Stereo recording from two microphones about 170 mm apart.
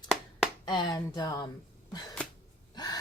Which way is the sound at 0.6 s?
25° left (ahead or behind).